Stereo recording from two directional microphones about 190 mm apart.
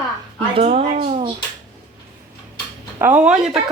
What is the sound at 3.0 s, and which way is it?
Speech, 10° right (ahead or behind).